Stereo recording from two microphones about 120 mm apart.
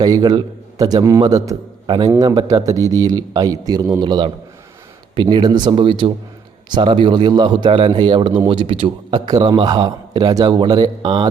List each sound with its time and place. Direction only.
0.0 s a man's voice: 30° right (ahead or behind)
9.2 s a man's voice: 30° right (ahead or behind)